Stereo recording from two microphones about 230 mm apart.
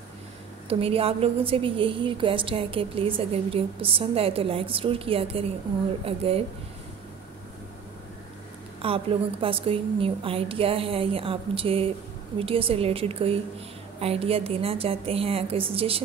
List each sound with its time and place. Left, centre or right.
0.7 s a woman's voice: right
8.8 s a woman's voice: right